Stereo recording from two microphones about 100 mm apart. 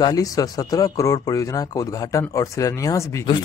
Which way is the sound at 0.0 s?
40° left (ahead or behind).